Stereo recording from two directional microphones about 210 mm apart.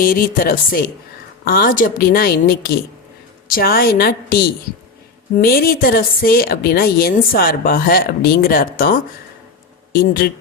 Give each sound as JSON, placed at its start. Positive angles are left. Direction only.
{"t": 0.0, "sound": "a woman's voice", "side_deg": 45}
{"t": 5.4, "sound": "a woman's voice", "side_deg": 45}